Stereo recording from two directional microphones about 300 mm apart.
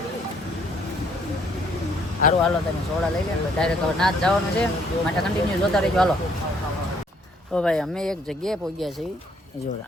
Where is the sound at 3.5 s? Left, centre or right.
Centre.